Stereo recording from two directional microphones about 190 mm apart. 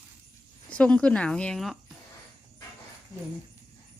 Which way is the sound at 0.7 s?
5° left (ahead or behind).